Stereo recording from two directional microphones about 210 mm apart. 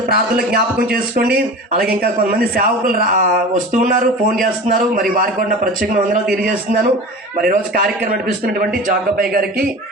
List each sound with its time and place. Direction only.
0.1 s speech: 45° right (ahead or behind)